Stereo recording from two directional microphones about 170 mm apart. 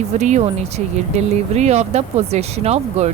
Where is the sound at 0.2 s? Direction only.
45° right (ahead or behind).